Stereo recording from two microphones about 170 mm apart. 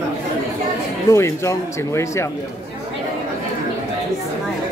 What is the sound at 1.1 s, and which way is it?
Speech, 15° left (ahead or behind).